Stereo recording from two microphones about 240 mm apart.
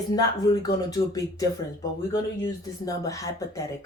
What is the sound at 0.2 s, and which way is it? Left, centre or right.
Speech, centre.